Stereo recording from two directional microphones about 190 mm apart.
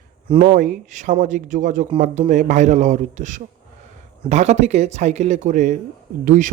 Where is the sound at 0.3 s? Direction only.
30° right (ahead or behind).